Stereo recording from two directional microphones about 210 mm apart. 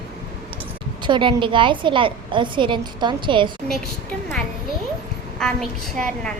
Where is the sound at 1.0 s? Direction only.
20° right (ahead or behind).